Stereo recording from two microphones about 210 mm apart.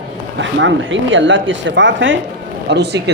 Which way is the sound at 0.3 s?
65° right (ahead or behind).